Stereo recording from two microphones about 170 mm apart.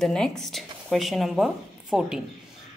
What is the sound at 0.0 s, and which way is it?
Speech, 5° left (ahead or behind).